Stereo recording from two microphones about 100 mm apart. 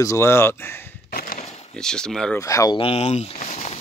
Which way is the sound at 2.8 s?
85° left.